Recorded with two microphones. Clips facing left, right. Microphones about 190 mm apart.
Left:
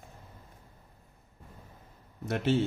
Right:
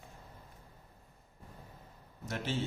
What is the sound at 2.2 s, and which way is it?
Speech, 60° left (ahead or behind).